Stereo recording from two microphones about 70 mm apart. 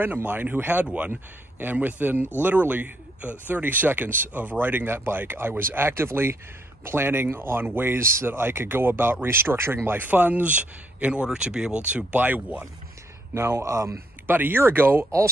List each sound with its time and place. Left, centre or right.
0.0 s speech: right
13.3 s speech: right
14.2 s speech: right